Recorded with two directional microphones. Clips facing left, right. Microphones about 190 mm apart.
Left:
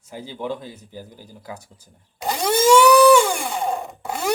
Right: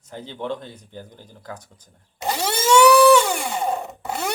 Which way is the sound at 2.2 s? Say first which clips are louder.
Left 4 dB; 5° right (ahead or behind).